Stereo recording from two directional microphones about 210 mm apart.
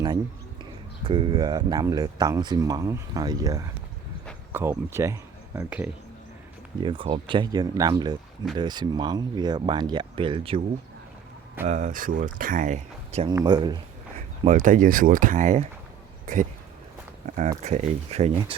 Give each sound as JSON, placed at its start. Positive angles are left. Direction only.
{"t": 0.6, "sound": "a man's voice", "side_deg": -20}
{"t": 6.8, "sound": "speech", "side_deg": -25}
{"t": 11.6, "sound": "speech", "side_deg": -35}
{"t": 13.2, "sound": "speech", "side_deg": -20}
{"t": 14.4, "sound": "speech", "side_deg": -40}